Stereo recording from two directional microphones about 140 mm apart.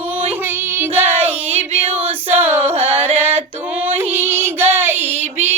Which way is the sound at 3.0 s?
15° right (ahead or behind).